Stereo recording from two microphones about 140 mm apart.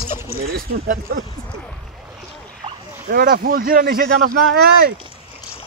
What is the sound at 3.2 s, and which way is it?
Speech, 90° right.